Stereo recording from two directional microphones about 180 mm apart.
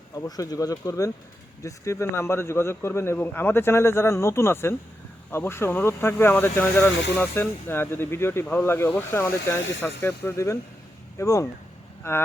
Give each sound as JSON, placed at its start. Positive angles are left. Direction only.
{"t": 0.1, "sound": "a man's voice", "side_deg": 20}